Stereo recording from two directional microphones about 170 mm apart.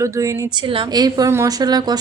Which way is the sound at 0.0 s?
20° right (ahead or behind).